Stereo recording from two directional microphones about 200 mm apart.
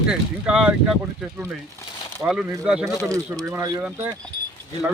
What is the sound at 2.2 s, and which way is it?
Speech, centre (ahead or behind).